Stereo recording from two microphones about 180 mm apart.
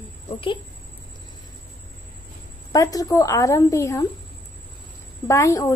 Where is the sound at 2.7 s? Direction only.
20° left (ahead or behind).